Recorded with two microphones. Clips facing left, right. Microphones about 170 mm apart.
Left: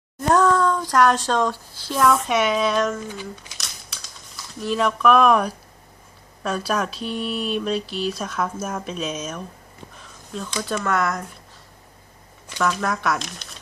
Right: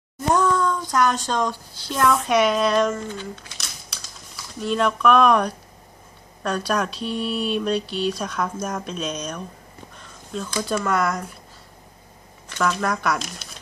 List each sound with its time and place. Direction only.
0.3 s speech: 5° right (ahead or behind)
3.6 s crumpling: centre (ahead or behind)
4.6 s speech: centre (ahead or behind)
12.6 s speech: centre (ahead or behind)